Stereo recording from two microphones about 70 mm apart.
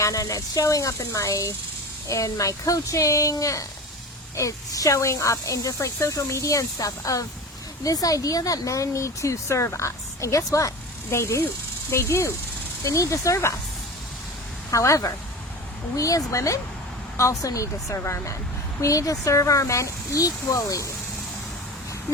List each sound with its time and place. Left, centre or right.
0.0 s speech: left
14.7 s speech: left